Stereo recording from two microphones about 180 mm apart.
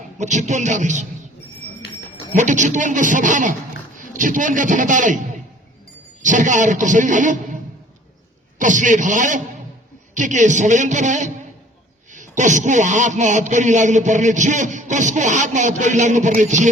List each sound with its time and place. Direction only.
0.2 s a man's voice: 40° right (ahead or behind)
2.3 s a man's voice: 45° right (ahead or behind)
6.2 s a man's voice: 45° right (ahead or behind)